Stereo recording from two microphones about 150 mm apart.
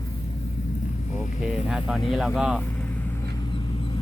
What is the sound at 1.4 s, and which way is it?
Speech, 5° right (ahead or behind).